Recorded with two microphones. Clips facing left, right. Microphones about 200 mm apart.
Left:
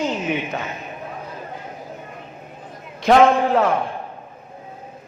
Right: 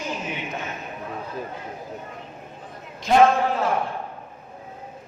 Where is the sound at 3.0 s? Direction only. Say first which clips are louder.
Left 3 dB; 70° left (ahead or behind).